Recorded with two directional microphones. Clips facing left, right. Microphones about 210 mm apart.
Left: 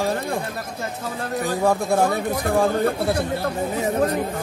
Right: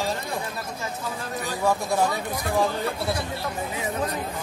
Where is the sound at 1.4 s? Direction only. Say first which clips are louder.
Left 4 dB; 50° left (ahead or behind).